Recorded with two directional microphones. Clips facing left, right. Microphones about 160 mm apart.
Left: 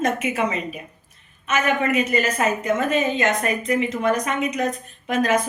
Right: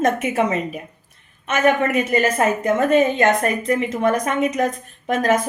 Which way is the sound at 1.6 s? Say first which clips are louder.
Right 5 dB; 50° right (ahead or behind).